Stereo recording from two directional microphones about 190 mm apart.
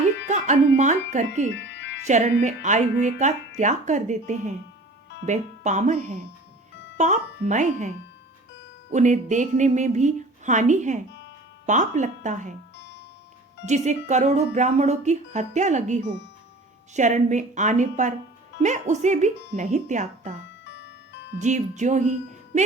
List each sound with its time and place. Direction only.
0.3 s speech: 40° right (ahead or behind)
1.5 s music: 65° left (ahead or behind)
2.0 s speech: 40° right (ahead or behind)
12.7 s music: 65° left (ahead or behind)
13.7 s speech: 40° right (ahead or behind)
20.7 s music: 65° left (ahead or behind)
21.3 s speech: 40° right (ahead or behind)